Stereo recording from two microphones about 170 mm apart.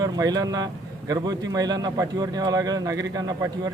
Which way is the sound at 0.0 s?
25° right (ahead or behind).